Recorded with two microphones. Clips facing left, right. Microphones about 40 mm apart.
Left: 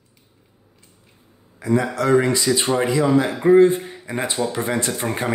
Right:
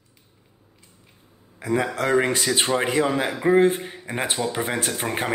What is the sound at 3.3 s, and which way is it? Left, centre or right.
Speech, centre.